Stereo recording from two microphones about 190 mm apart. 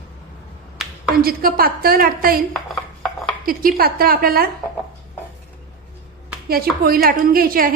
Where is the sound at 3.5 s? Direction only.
50° right (ahead or behind).